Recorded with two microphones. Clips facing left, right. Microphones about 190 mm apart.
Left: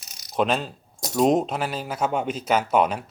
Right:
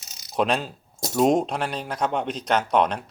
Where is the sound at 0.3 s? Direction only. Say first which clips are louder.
Even; centre (ahead or behind).